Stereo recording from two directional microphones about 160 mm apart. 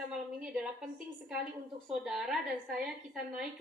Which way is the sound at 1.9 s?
5° right (ahead or behind).